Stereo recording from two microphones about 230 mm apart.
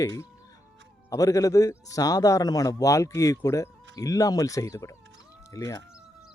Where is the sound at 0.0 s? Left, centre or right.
Centre.